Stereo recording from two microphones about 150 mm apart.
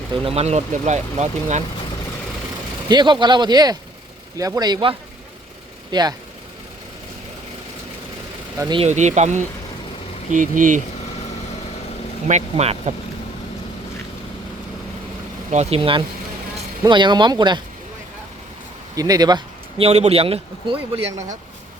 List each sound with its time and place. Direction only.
0.3 s speech: 45° right (ahead or behind)
2.9 s speech: 30° right (ahead or behind)
8.5 s speech: 20° right (ahead or behind)
8.8 s speech: 50° right (ahead or behind)
12.3 s speech: 45° right (ahead or behind)
15.4 s a man's voice: 45° right (ahead or behind); by 17.6 s 30° right (ahead or behind)
18.9 s speech: 25° right (ahead or behind)
19.8 s a man's voice: 45° right (ahead or behind)